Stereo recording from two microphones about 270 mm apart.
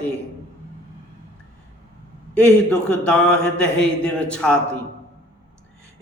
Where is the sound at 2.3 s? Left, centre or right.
Centre.